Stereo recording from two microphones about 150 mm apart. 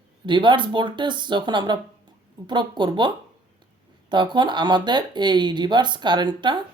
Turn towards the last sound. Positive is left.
turn(degrees=-30)  # may be behind; listen again after turning